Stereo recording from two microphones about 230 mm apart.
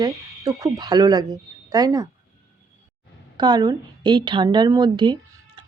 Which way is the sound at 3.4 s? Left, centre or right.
Centre.